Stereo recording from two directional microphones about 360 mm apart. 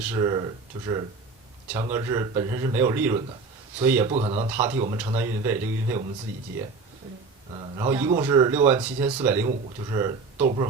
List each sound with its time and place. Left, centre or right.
0.0 s speech: centre
4.1 s speech: centre
4.5 s speech: centre
7.5 s speech: centre